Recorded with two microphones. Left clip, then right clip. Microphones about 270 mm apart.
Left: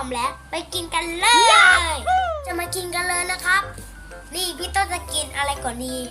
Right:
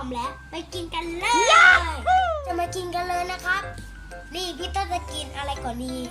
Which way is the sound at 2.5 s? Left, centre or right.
Centre.